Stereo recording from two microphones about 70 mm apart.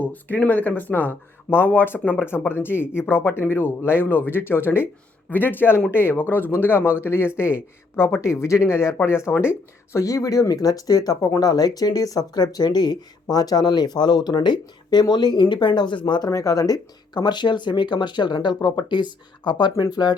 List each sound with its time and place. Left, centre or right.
0.0 s speech: left
13.3 s speech: left
16.3 s speech: left